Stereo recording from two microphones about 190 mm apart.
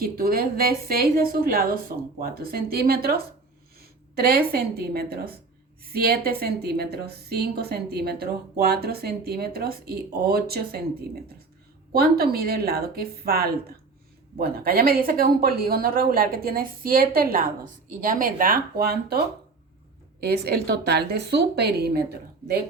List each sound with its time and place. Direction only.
0.0 s a woman's voice: 50° right (ahead or behind)
20.2 s a woman's voice: 55° right (ahead or behind)